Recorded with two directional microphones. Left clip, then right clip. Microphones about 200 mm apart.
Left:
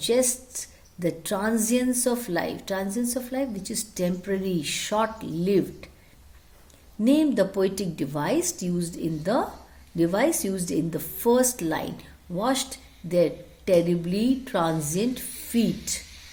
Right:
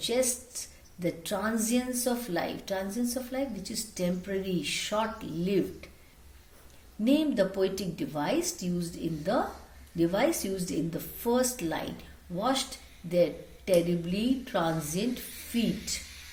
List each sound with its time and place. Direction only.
0.0 s a woman's voice: 55° left (ahead or behind)
7.0 s a woman's voice: 55° left (ahead or behind)